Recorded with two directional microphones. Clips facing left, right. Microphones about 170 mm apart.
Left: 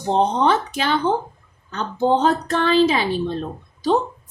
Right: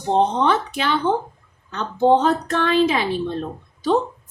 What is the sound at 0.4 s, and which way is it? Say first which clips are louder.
Speech: left 1 dB; 40° left (ahead or behind).